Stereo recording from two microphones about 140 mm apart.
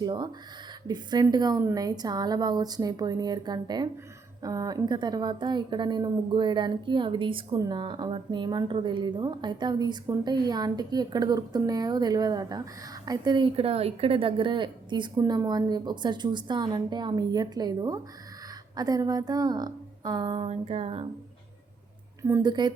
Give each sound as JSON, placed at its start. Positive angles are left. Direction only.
{"t": 0.0, "sound": "a woman's voice", "side_deg": -30}
{"t": 20.5, "sound": "a sound", "side_deg": -50}
{"t": 22.2, "sound": "a woman's voice", "side_deg": -20}
{"t": 22.4, "sound": "speech", "side_deg": -30}